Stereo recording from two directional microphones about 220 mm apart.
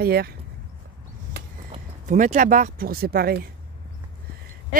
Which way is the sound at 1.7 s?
30° right (ahead or behind).